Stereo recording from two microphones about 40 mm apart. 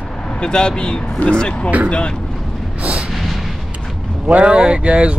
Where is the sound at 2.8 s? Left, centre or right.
Right.